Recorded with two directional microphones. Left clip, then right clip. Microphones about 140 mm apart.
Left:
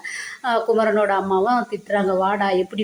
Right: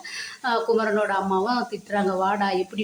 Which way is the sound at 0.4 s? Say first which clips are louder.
Left 4 dB; 20° left (ahead or behind).